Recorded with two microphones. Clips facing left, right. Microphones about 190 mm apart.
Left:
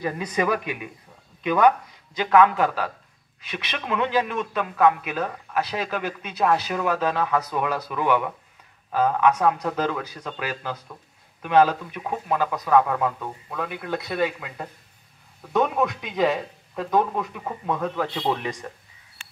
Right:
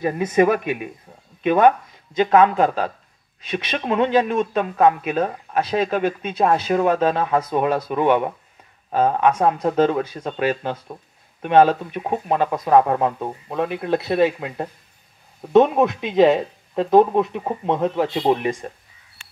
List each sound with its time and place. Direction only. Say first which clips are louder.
0.0 s speech: right 7 dB; 25° right (ahead or behind)